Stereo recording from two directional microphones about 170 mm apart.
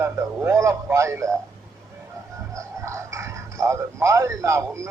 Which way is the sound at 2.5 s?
15° right (ahead or behind).